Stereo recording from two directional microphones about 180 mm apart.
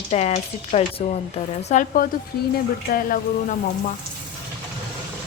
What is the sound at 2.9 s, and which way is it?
Speech, 55° left (ahead or behind).